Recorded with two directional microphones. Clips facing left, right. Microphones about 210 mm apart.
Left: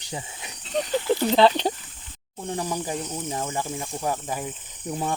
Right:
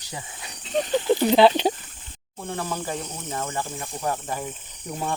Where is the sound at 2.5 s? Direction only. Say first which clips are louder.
Left 1 dB; 15° left (ahead or behind).